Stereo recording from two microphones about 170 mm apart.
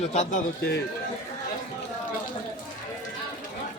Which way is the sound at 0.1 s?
45° left (ahead or behind).